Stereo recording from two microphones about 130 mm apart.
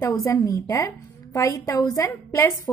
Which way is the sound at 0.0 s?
15° left (ahead or behind).